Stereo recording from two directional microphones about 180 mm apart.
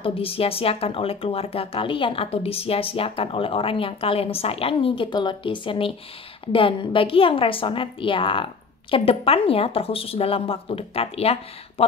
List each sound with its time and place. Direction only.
0.0 s a woman's voice: 30° left (ahead or behind)